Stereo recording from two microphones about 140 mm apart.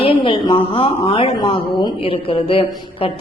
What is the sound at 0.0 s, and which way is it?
A woman's voice, 35° left (ahead or behind).